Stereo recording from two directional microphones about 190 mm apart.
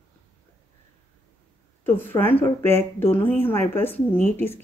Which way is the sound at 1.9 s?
10° left (ahead or behind).